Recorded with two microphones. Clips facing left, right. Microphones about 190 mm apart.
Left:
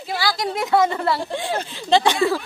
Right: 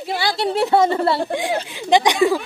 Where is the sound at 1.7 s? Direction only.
15° right (ahead or behind).